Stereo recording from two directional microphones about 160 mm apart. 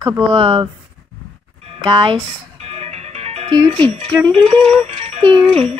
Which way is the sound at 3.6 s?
35° right (ahead or behind).